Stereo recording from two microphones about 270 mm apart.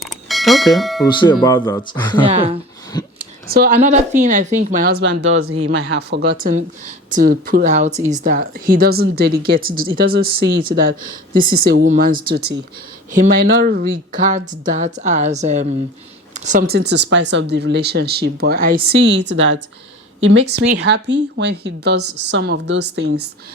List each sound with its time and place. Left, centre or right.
0.0 s a sound: centre
0.8 s speech: centre
1.0 s speech: centre
3.5 s speech: right
6.0 s a woman's voice: right